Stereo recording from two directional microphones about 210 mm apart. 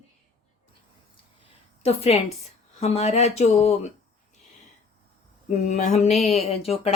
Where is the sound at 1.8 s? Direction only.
30° left (ahead or behind).